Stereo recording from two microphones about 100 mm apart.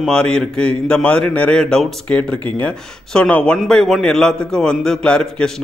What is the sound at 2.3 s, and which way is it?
Speech, 40° right (ahead or behind).